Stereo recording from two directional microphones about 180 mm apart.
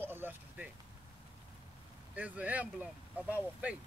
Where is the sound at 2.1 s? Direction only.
10° right (ahead or behind).